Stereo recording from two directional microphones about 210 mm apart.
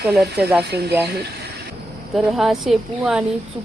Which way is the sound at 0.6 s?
50° right (ahead or behind).